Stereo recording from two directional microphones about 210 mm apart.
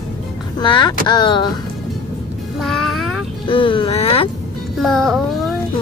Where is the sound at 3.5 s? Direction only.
25° left (ahead or behind).